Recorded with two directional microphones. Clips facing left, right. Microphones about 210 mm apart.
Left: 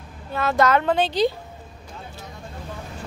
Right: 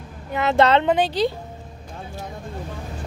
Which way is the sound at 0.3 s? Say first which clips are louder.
Right 2 dB; 20° right (ahead or behind).